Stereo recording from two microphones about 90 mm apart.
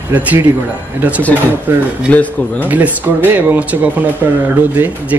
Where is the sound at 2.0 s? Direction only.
15° left (ahead or behind).